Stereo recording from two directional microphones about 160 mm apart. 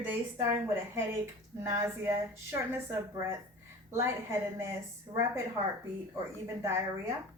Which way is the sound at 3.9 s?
15° right (ahead or behind).